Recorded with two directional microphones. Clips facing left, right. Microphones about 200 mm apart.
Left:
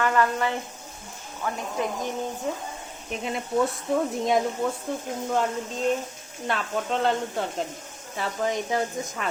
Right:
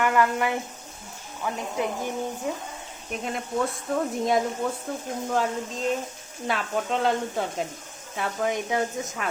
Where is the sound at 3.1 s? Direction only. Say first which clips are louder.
Left 1 dB; centre (ahead or behind).